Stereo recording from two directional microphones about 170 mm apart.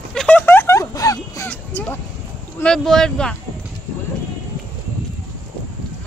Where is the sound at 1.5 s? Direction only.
10° left (ahead or behind).